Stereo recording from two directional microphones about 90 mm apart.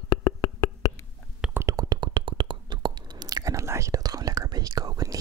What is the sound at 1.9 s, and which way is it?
Whispering, 60° right (ahead or behind).